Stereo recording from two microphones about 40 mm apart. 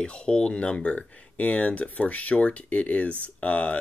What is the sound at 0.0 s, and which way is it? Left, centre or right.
Speech, left.